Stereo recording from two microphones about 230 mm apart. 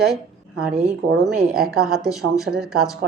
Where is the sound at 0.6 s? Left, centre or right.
Centre.